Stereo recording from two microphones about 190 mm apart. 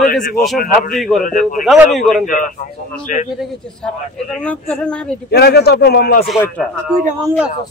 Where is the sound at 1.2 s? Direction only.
45° left (ahead or behind).